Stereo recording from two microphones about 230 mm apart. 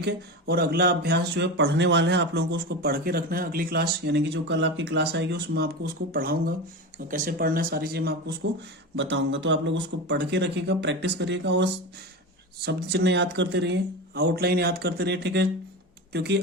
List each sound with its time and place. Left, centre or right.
0.0 s speech: right